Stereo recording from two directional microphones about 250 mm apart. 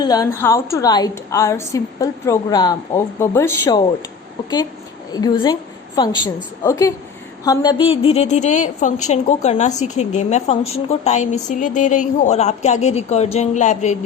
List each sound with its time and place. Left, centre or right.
0.0 s a woman's voice: centre
5.1 s a woman's voice: centre